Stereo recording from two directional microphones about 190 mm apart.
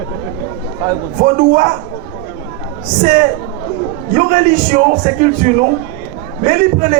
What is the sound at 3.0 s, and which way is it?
A man's voice, 45° right (ahead or behind).